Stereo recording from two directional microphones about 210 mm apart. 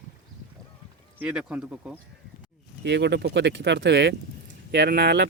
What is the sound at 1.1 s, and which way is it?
Speech, 5° right (ahead or behind).